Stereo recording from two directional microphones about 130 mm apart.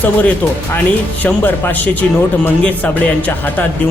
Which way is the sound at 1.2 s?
15° left (ahead or behind).